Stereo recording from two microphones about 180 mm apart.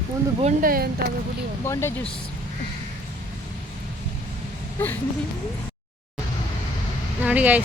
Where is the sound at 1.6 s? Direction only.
15° left (ahead or behind).